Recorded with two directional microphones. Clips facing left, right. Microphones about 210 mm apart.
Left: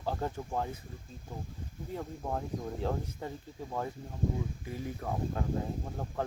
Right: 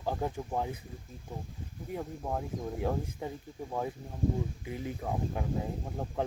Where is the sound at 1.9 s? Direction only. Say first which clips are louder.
Right 1 dB; 10° right (ahead or behind).